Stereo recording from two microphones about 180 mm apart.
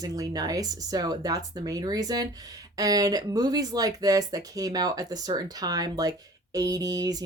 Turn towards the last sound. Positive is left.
turn(degrees=-20)  # may be behind; listen again after turning